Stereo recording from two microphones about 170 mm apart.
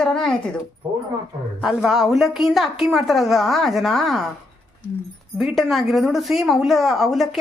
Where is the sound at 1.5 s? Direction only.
Centre (ahead or behind).